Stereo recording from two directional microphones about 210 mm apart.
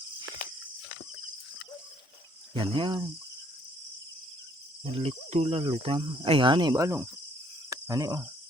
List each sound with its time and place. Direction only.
0.3 s a sound: 45° left (ahead or behind)
2.5 s speech: 25° right (ahead or behind)
4.9 s speech: 30° right (ahead or behind)
7.7 s cricket: 15° right (ahead or behind)